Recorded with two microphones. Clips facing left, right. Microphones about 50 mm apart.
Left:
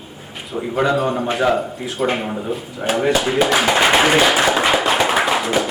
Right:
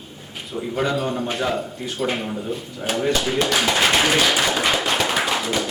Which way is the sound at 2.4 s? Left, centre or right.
Centre.